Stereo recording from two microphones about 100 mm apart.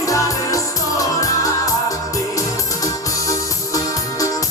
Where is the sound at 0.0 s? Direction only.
35° left (ahead or behind).